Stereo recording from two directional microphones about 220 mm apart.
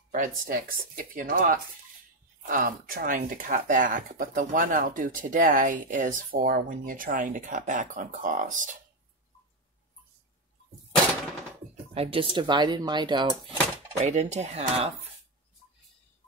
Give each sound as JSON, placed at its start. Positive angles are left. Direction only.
{"t": 0.1, "sound": "speech", "side_deg": -35}
{"t": 11.9, "sound": "speech", "side_deg": -25}
{"t": 14.0, "sound": "speech", "side_deg": -30}